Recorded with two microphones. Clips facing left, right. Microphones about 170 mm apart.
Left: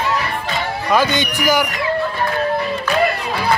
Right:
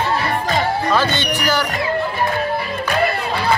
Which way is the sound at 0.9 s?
15° left (ahead or behind).